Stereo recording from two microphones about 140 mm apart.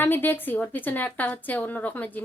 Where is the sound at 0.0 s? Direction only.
15° left (ahead or behind).